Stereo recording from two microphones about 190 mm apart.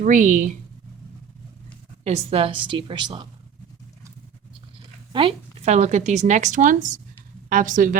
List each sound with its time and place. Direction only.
0.0 s speech: 45° right (ahead or behind)
2.0 s a woman's voice: 30° right (ahead or behind)
5.1 s a woman's voice: 30° right (ahead or behind)